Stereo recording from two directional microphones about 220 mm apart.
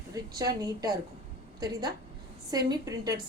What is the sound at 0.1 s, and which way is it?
A woman's voice, 15° right (ahead or behind).